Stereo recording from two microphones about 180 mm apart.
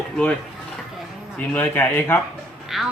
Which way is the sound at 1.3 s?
10° left (ahead or behind).